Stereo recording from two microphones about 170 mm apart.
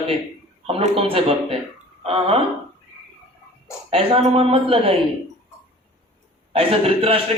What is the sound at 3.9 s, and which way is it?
Speech, 35° right (ahead or behind).